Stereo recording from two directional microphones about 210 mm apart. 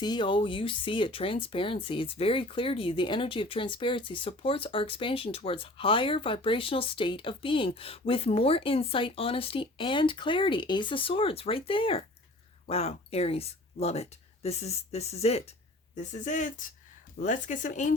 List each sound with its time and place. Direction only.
0.0 s speech: 20° left (ahead or behind); by 17.9 s 35° left (ahead or behind)